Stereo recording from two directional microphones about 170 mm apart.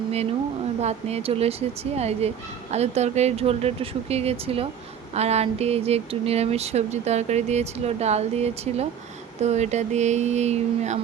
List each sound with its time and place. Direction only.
0.1 s speech: 40° right (ahead or behind)